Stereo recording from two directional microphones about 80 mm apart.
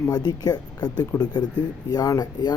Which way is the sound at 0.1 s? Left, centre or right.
Left.